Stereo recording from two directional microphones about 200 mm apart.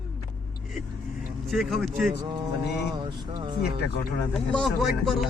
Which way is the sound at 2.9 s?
20° right (ahead or behind).